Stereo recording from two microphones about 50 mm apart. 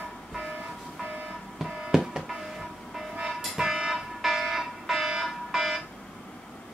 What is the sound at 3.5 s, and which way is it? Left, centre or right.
Fire alarm, centre.